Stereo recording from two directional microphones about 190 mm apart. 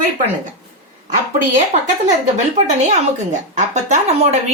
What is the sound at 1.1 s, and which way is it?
Speech, 40° right (ahead or behind).